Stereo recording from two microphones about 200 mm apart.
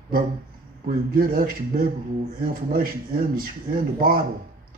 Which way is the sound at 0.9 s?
45° right (ahead or behind).